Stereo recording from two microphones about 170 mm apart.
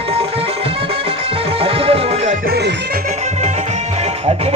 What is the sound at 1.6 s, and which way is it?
Music, 35° right (ahead or behind).